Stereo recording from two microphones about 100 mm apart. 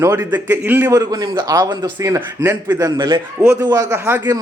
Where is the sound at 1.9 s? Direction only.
30° right (ahead or behind).